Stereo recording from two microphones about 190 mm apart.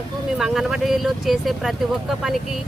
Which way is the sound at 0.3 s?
Centre (ahead or behind).